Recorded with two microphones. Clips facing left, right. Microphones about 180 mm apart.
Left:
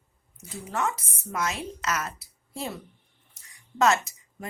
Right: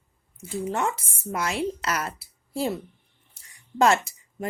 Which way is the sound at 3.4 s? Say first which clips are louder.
Right 3 dB; 30° right (ahead or behind).